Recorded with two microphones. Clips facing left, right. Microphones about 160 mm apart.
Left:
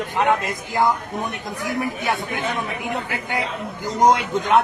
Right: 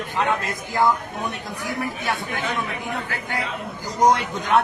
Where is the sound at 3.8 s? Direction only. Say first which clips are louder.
Left 2 dB; 20° left (ahead or behind).